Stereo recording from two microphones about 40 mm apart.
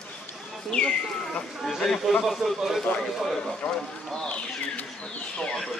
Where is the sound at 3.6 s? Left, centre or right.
Left.